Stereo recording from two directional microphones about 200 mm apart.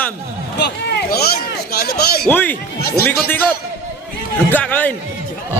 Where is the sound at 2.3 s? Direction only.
10° left (ahead or behind).